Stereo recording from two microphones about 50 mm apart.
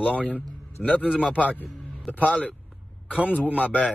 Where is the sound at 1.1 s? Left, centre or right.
Centre.